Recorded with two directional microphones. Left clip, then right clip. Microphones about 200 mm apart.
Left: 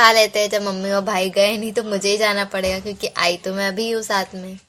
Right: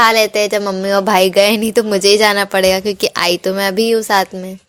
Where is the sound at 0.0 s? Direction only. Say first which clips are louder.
Right 2 dB; 30° right (ahead or behind).